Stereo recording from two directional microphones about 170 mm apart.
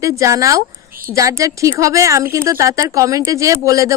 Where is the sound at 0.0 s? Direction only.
20° right (ahead or behind).